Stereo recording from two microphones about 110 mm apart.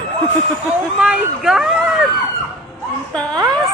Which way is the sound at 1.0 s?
5° right (ahead or behind).